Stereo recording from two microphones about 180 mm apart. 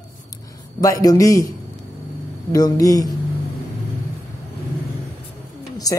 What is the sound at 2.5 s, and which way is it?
Speech, 20° left (ahead or behind).